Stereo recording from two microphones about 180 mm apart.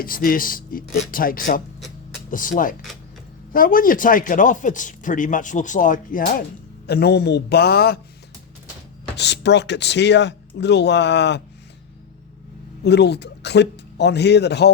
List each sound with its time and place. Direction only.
0.0 s speech: 55° left (ahead or behind)
6.8 s a man's voice: 65° left (ahead or behind)
9.1 s speech: 70° left (ahead or behind)
12.8 s speech: 70° left (ahead or behind)